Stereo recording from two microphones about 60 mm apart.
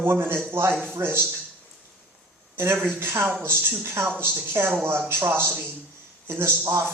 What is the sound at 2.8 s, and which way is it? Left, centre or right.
Speech, right.